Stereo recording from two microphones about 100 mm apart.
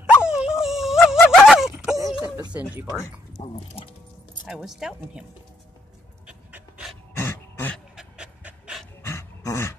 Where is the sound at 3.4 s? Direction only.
65° left (ahead or behind).